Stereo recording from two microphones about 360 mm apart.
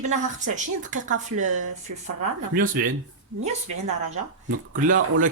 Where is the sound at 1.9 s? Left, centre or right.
Right.